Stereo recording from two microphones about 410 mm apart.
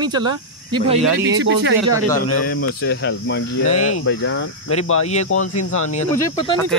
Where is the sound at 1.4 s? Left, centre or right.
Right.